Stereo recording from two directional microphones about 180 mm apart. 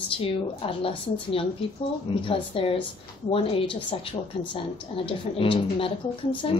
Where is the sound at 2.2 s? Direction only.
30° left (ahead or behind).